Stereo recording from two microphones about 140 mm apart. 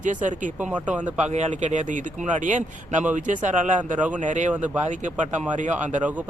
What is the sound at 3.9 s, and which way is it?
Speech, 10° right (ahead or behind).